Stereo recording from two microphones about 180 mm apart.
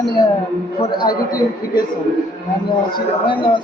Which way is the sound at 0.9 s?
25° left (ahead or behind).